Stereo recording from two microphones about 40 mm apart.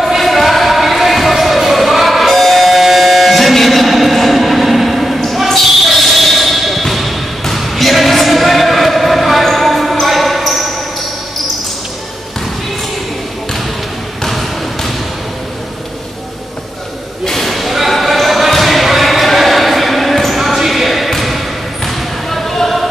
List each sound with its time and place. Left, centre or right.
0.0 s a sound: centre
1.6 s music: centre
9.9 s basketball bounce: centre
14.2 s basketball bounce: centre
17.2 s basketball bounce: centre